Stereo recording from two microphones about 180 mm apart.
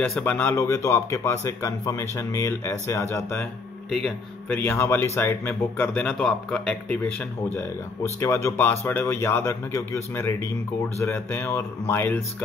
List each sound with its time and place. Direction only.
0.0 s speech: 10° left (ahead or behind)
8.2 s speech: 15° left (ahead or behind)